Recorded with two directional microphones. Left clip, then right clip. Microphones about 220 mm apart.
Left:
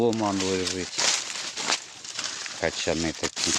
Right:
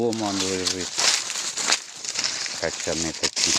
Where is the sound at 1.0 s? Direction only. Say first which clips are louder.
Right 3 dB; 30° right (ahead or behind).